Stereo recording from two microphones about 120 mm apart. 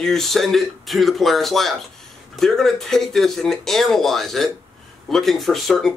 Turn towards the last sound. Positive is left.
turn(degrees=5)  # may be behind; listen again after turning